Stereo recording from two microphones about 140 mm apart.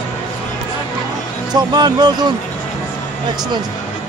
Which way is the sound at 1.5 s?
30° right (ahead or behind).